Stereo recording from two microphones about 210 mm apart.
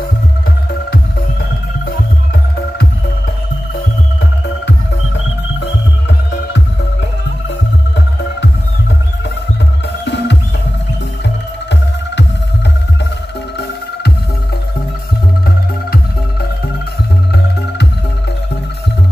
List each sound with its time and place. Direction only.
10.0 s music: 55° left (ahead or behind)
15.4 s music: 45° left (ahead or behind)